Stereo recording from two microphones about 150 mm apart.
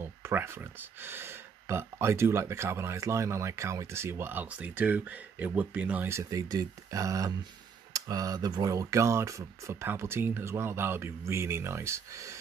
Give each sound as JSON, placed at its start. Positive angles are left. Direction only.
{"t": 0.0, "sound": "speech", "side_deg": -15}